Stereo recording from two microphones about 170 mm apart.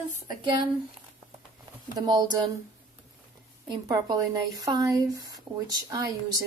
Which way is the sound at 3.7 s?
25° right (ahead or behind).